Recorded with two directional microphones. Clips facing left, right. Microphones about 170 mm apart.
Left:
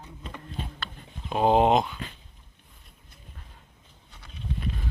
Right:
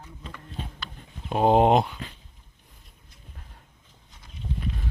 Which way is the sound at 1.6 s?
50° right (ahead or behind).